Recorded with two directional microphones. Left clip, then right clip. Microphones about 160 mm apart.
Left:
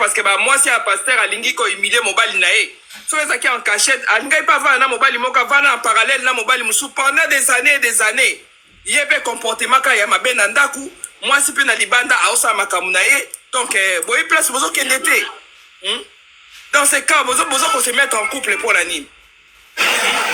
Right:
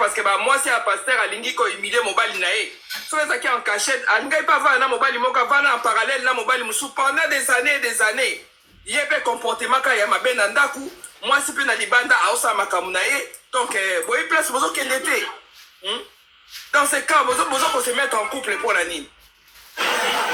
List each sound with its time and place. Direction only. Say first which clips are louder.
0.0 s a man's voice: left 4 dB; 20° left (ahead or behind)
16.7 s a man's voice: left 3 dB; 15° left (ahead or behind)
18.8 s speech: left 5 dB; 10° left (ahead or behind)
19.7 s a sound: left 5 dB; 15° left (ahead or behind)